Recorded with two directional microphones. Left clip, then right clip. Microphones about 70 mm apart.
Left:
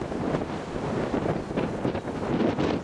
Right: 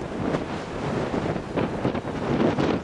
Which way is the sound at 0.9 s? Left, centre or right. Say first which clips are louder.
Right 1 dB; centre.